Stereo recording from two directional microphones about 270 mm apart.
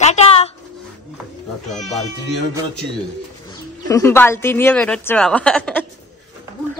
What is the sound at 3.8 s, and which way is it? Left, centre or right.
A woman's voice, centre.